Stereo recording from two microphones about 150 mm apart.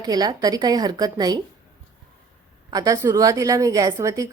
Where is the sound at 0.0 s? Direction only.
25° right (ahead or behind).